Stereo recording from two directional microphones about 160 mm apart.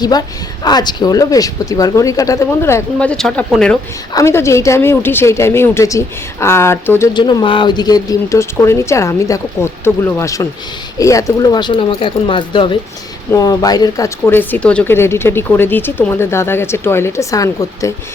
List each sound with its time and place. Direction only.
0.0 s speech: 25° left (ahead or behind); by 3.8 s 5° left (ahead or behind)
4.1 s speech: 20° left (ahead or behind)
7.1 s speech: 30° left (ahead or behind)